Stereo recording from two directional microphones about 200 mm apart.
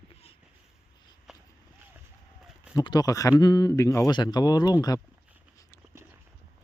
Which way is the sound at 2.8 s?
20° left (ahead or behind).